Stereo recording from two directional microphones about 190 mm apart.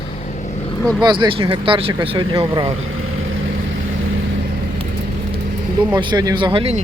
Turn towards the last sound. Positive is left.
turn(degrees=-30)  # may be behind; listen again after turning